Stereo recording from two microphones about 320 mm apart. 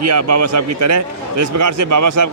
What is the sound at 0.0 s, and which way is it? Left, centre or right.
A man's voice, right.